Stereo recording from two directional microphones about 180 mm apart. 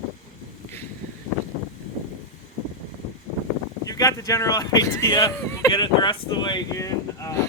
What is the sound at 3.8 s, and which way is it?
Speech, 20° left (ahead or behind).